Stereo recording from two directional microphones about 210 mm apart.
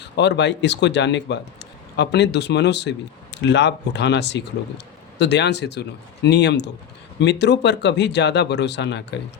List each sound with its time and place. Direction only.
0.0 s speech: 55° left (ahead or behind)